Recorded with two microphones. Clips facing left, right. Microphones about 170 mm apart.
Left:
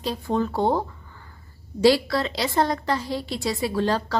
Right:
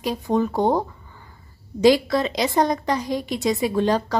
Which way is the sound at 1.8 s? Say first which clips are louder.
Right 2 dB; 20° right (ahead or behind).